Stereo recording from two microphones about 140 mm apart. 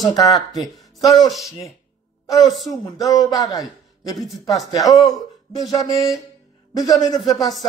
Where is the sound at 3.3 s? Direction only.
25° left (ahead or behind).